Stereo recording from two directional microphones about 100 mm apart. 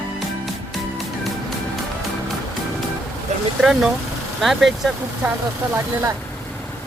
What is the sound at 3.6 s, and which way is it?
Speech, 5° right (ahead or behind).